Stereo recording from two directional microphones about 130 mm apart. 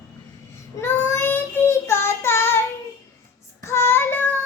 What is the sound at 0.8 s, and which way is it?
Child singing, 20° left (ahead or behind).